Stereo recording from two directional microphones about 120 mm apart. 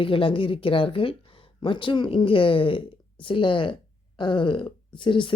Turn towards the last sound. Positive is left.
turn(degrees=40)  # may be behind; listen again after turning